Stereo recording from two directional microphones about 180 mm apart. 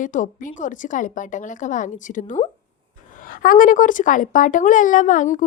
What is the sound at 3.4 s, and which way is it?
Speech, 50° left (ahead or behind).